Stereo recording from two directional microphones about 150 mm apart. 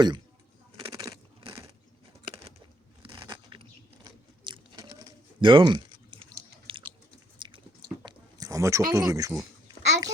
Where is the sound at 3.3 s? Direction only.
35° right (ahead or behind).